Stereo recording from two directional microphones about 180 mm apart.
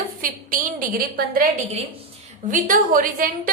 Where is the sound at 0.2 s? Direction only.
50° right (ahead or behind).